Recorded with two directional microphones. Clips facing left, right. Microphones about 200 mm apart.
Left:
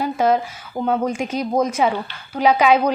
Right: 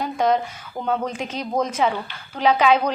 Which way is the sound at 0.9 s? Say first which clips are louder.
Left 4 dB; 10° left (ahead or behind).